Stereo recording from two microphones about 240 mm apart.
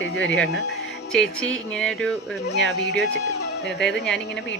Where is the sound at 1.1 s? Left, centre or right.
Centre.